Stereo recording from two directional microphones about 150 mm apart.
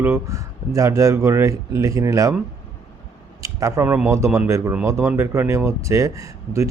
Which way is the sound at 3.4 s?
20° right (ahead or behind).